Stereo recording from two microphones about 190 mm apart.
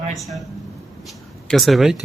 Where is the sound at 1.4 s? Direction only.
Centre (ahead or behind).